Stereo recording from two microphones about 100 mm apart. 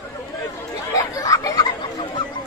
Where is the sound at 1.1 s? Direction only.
35° left (ahead or behind).